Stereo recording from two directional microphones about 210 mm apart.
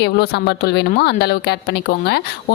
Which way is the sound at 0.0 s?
50° left (ahead or behind).